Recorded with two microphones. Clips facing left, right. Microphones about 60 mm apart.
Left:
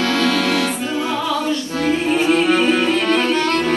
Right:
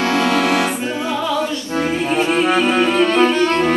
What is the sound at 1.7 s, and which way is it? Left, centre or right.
Music, right.